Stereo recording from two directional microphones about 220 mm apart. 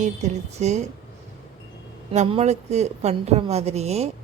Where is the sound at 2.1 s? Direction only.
30° right (ahead or behind).